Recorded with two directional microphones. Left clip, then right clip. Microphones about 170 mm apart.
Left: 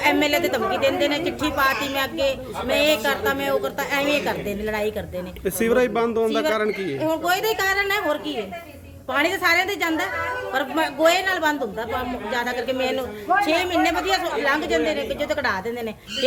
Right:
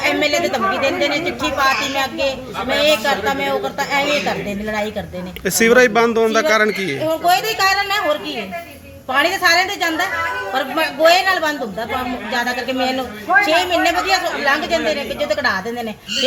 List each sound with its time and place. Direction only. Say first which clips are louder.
0.0 s a woman's voice: right 3 dB; 25° left (ahead or behind)
5.5 s speech: right 8 dB; 10° left (ahead or behind)
7.0 s a woman's voice: right 6 dB; 25° left (ahead or behind)
9.1 s a woman's voice: right 5 dB; 25° left (ahead or behind)